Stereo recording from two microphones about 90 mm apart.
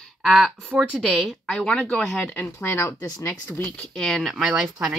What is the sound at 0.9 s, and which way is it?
Speech, 15° right (ahead or behind).